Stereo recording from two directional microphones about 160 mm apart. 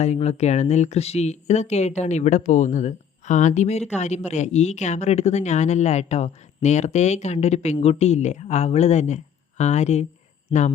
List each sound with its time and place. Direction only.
0.0 s speech: 45° left (ahead or behind)
10.5 s speech: 30° left (ahead or behind)